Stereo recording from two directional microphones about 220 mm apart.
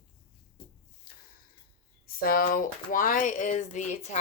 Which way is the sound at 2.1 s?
40° left (ahead or behind).